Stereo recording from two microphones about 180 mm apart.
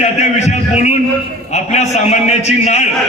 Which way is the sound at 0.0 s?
40° left (ahead or behind).